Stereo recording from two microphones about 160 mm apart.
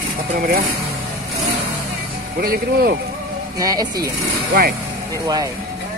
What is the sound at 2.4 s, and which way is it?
Speech, 70° right (ahead or behind).